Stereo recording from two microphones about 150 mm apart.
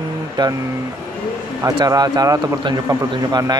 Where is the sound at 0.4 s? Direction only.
30° right (ahead or behind).